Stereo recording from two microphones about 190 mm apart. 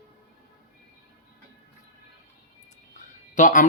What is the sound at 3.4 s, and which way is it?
Speech, 45° left (ahead or behind).